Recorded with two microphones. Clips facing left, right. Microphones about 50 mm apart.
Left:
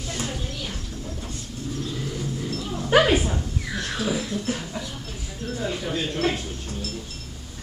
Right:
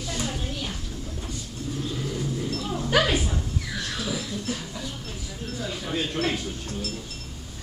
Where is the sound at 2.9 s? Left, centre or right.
Centre.